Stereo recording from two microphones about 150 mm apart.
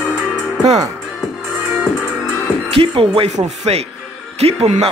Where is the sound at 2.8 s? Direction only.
40° right (ahead or behind).